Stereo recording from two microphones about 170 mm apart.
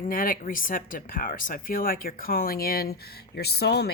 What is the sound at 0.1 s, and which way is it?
Speech, 55° left (ahead or behind).